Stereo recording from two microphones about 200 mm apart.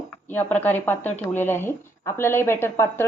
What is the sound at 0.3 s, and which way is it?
Speech, 10° left (ahead or behind).